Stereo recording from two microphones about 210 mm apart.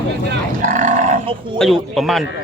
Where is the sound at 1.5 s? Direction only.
Centre (ahead or behind).